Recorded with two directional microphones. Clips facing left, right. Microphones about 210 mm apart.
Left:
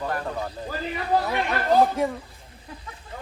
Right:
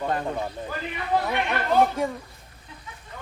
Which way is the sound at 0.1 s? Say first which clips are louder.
Right 2 dB; 25° right (ahead or behind).